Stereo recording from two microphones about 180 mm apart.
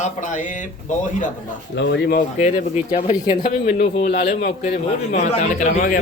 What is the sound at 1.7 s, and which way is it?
Speech, 75° left (ahead or behind).